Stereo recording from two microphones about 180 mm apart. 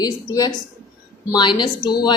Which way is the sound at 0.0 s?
20° left (ahead or behind).